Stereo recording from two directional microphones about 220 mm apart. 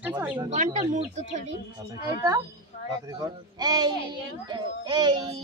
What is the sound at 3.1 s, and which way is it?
Speech, 20° right (ahead or behind).